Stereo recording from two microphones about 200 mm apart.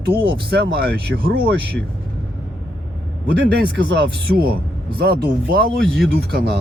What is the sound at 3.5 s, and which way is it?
Speech, 55° right (ahead or behind).